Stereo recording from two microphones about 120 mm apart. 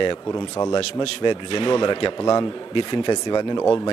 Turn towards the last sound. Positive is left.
turn(degrees=30)  # may be behind; listen again after turning